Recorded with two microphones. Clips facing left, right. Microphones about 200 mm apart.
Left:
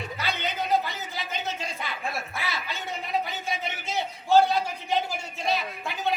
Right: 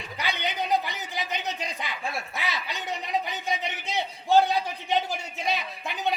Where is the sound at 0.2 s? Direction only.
15° right (ahead or behind).